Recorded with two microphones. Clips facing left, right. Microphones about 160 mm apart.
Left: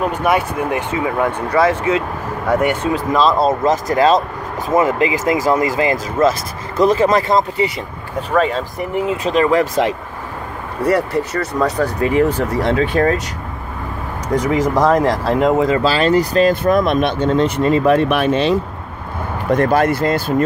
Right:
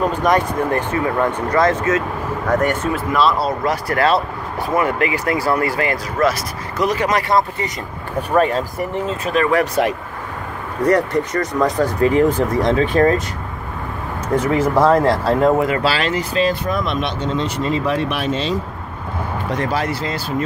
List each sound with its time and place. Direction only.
0.0 s speech: 10° left (ahead or behind)
3.1 s speech: 25° left (ahead or behind)
8.2 s speech: 10° right (ahead or behind)
8.9 s speech: 15° left (ahead or behind)
10.8 s speech: 10° left (ahead or behind)
14.3 s speech: 15° left (ahead or behind)
15.7 s speech: 35° left (ahead or behind)